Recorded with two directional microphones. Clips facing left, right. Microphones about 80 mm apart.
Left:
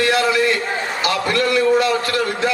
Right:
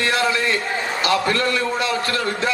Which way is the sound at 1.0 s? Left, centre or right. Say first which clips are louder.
Even; right.